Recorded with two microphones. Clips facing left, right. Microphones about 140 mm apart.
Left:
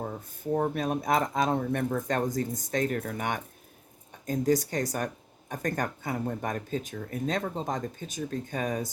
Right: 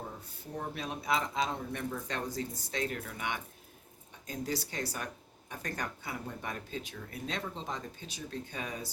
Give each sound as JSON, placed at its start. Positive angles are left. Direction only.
{"t": 0.5, "sound": "speech", "side_deg": 50}